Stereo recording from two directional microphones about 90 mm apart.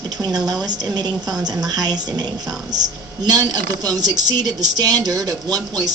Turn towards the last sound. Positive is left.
turn(degrees=-45)  # may be behind; listen again after turning